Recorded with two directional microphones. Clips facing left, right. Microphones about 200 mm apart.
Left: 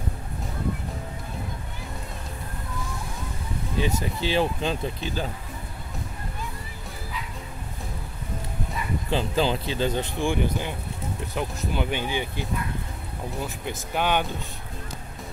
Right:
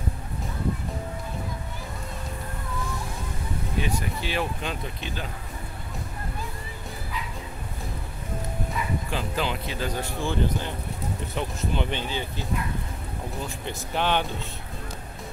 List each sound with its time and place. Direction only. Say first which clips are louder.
3.8 s speech: left 3 dB; 30° left (ahead or behind)
9.1 s speech: left 7 dB; 30° left (ahead or behind); by 12.4 s 15° left (ahead or behind)
13.7 s speech: even; 5° left (ahead or behind)